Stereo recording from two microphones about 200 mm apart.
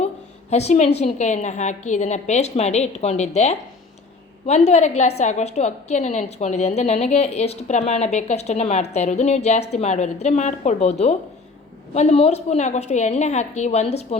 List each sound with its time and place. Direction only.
0.5 s a woman's voice: 35° left (ahead or behind)